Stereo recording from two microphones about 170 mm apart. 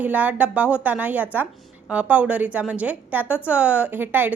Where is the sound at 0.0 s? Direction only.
10° right (ahead or behind).